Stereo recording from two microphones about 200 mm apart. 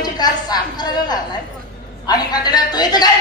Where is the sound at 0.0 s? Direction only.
20° left (ahead or behind).